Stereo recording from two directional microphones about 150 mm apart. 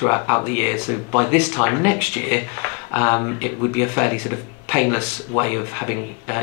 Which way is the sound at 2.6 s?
20° left (ahead or behind).